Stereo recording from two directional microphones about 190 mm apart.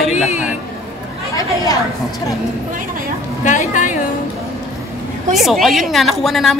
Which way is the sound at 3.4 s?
40° left (ahead or behind).